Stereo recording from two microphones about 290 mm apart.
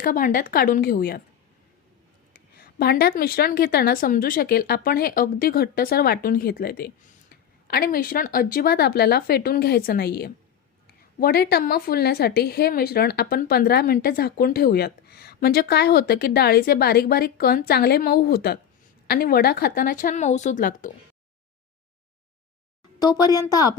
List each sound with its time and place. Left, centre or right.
0.0 s speech: left
2.3 s a woman's voice: left
23.0 s a woman's voice: centre